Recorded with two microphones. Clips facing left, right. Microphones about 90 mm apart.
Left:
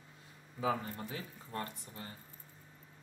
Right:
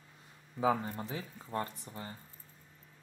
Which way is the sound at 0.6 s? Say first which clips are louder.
Right 4 dB; 30° right (ahead or behind).